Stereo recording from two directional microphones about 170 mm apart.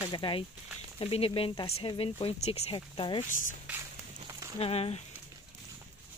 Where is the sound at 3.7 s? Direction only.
15° right (ahead or behind).